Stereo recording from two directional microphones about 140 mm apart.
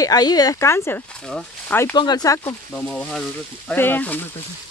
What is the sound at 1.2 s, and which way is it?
Speech, 5° left (ahead or behind).